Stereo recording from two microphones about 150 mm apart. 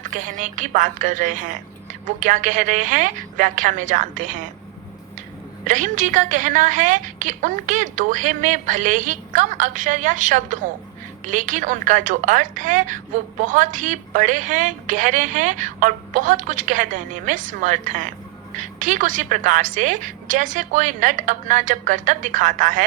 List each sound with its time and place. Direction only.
0.3 s a woman's voice: 55° right (ahead or behind)
5.6 s a woman's voice: 60° right (ahead or behind)